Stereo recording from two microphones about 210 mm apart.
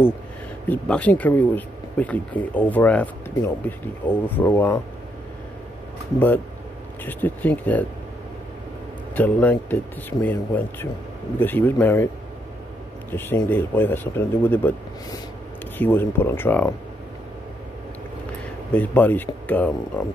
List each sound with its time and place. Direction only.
0.7 s speech: 5° left (ahead or behind)
6.1 s speech: 10° left (ahead or behind)
9.1 s speech: 10° left (ahead or behind)
13.1 s speech: 10° left (ahead or behind)
15.8 s speech: 10° left (ahead or behind)
18.7 s speech: 10° left (ahead or behind)